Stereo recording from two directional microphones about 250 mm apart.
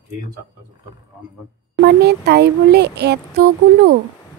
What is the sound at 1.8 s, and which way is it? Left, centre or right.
Speech, right.